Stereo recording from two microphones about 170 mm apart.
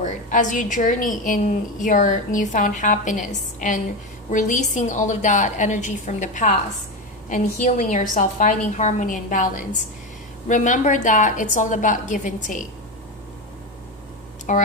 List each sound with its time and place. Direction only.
0.0 s a woman's voice: 50° left (ahead or behind)
14.5 s a woman's voice: 45° left (ahead or behind)